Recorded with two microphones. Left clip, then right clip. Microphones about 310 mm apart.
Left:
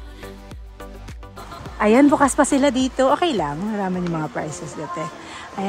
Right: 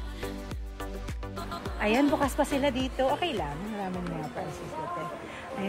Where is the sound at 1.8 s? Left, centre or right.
Centre.